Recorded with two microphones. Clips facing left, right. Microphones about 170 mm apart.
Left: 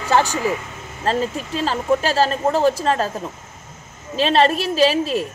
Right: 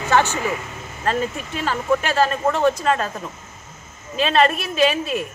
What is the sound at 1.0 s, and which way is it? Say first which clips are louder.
A woman's voice: left 2 dB; 35° left (ahead or behind).